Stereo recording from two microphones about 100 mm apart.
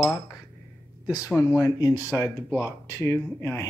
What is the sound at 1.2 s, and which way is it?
Speech, 10° right (ahead or behind).